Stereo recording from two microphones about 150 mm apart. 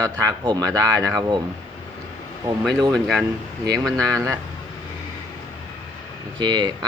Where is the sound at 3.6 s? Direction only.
25° right (ahead or behind).